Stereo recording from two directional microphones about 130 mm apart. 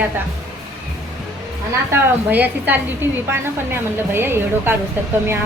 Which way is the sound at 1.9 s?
15° right (ahead or behind).